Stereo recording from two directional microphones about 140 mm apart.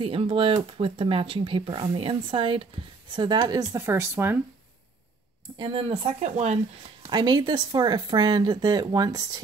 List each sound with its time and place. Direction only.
0.0 s speech: 40° right (ahead or behind); by 4.4 s 15° right (ahead or behind)
5.6 s speech: 40° right (ahead or behind)
7.1 s speech: 30° right (ahead or behind)